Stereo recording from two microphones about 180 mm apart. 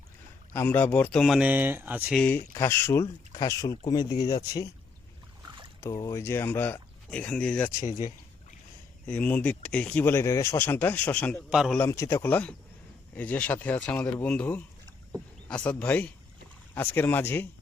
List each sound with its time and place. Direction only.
0.5 s speech: 10° left (ahead or behind); by 2.1 s 10° right (ahead or behind)
2.1 s speech: 10° left (ahead or behind)
5.4 s boat: 25° right (ahead or behind)
5.8 s speech: 20° left (ahead or behind)
7.9 s a sound: 40° left (ahead or behind)
9.0 s speech: 10° left (ahead or behind)
11.5 s speech: 5° right (ahead or behind)
11.8 s speech: 15° left (ahead or behind)